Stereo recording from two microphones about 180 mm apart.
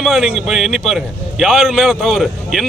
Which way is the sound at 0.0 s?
Centre (ahead or behind).